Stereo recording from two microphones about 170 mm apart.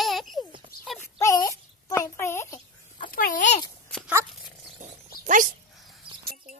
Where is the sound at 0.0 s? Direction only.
Centre (ahead or behind).